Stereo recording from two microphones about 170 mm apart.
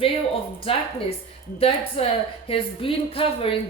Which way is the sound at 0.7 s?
35° left (ahead or behind).